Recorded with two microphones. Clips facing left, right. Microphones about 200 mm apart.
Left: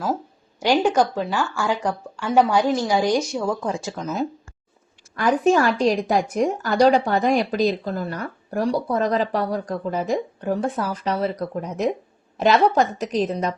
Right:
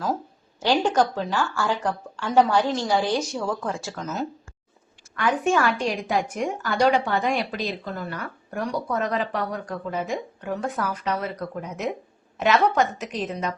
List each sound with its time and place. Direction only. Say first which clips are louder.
0.6 s speech: left 3 dB; 10° left (ahead or behind)
5.1 s speech: left 4 dB; 35° left (ahead or behind)